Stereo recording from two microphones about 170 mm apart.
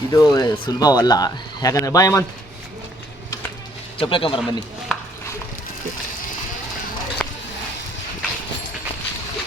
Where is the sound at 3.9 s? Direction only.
30° left (ahead or behind).